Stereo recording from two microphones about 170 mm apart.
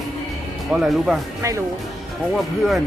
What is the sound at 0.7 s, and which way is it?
Speech, 5° right (ahead or behind).